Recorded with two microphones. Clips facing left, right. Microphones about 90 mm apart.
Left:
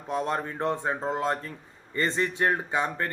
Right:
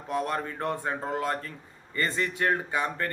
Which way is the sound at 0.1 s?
20° left (ahead or behind).